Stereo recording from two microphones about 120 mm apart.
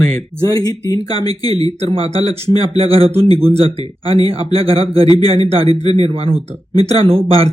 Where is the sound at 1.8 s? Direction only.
55° right (ahead or behind).